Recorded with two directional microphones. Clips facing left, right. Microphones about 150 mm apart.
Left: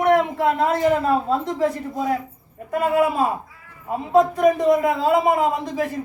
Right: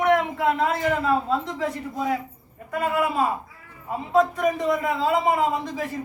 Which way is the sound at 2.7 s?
45° left (ahead or behind).